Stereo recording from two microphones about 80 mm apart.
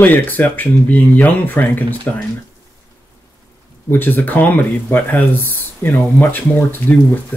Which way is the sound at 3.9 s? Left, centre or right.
Left.